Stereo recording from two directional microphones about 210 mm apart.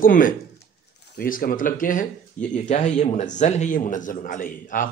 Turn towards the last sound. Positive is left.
turn(degrees=40)  # may be behind; listen again after turning